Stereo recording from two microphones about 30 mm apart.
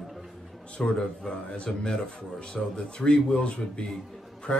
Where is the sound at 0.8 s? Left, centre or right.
Left.